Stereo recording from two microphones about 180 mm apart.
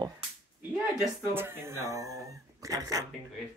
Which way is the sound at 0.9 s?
10° right (ahead or behind).